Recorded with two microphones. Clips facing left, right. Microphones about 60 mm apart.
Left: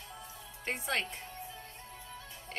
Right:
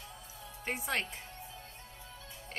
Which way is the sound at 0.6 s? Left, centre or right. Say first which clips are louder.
Left 1 dB; centre.